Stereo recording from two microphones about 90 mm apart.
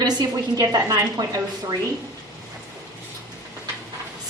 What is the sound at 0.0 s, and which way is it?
A woman's voice, 45° right (ahead or behind).